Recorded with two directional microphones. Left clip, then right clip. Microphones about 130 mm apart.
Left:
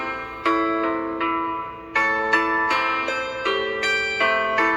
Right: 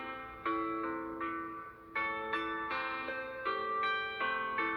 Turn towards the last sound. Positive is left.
turn(degrees=30)  # may be behind; listen again after turning